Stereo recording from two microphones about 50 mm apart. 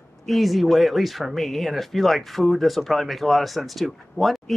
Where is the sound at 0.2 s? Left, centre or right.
Centre.